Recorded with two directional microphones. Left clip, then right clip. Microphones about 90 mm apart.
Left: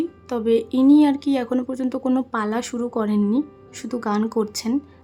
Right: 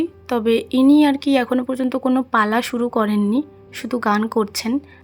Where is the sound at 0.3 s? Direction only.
25° right (ahead or behind).